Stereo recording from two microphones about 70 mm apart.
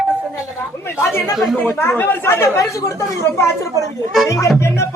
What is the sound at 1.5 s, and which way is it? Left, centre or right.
Music, left.